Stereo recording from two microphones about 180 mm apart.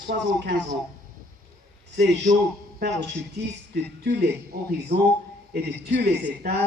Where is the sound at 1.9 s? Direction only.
70° right (ahead or behind).